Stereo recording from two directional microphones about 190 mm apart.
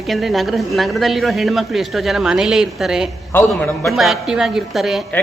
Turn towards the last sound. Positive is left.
turn(degrees=0)  # may be behind; listen again after turning